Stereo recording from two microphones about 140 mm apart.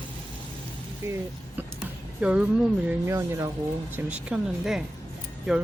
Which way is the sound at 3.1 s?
20° right (ahead or behind).